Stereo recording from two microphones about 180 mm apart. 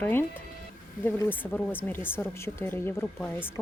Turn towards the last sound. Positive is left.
turn(degrees=10)  # may be behind; listen again after turning